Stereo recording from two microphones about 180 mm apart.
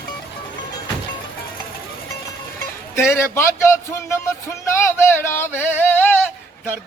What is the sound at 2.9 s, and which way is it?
A man's voice, 15° left (ahead or behind).